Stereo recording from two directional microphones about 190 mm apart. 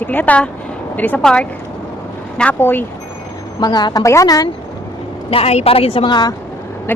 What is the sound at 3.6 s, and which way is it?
Speech, 20° left (ahead or behind).